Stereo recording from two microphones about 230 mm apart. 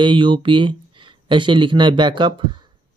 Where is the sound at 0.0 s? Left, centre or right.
Right.